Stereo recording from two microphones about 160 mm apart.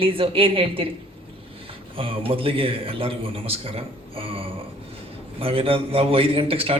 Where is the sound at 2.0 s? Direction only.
35° right (ahead or behind).